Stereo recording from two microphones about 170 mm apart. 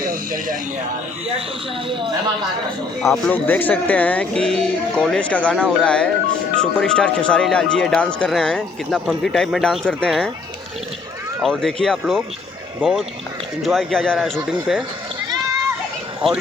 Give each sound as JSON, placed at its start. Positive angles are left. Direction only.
{"t": 0.0, "sound": "a sound", "side_deg": -55}
{"t": 3.0, "sound": "speech", "side_deg": 0}
{"t": 3.3, "sound": "speech", "side_deg": 10}
{"t": 11.4, "sound": "speech", "side_deg": 5}